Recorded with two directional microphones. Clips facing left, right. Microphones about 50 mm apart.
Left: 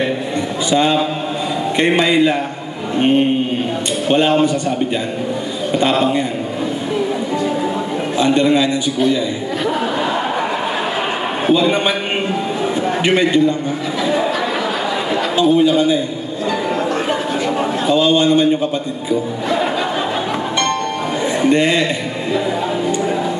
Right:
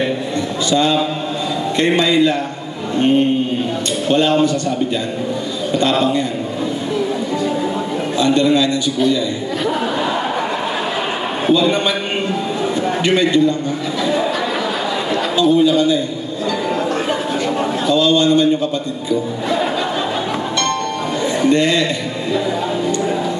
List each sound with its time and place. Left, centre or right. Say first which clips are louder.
0.7 s a man's voice: left 1 dB; left
4.1 s a man's voice: left 1 dB; left
5.8 s a man's voice: left 1 dB; left
8.2 s a man's voice: even; left
10.7 s chuckle: left 1 dB; left
13.0 s a man's voice: even; left
15.3 s a man's voice: even; left
16.4 s a sound: left 1 dB; centre
17.6 s a man's voice: left 1 dB; left
20.2 s a sound: left 1 dB; centre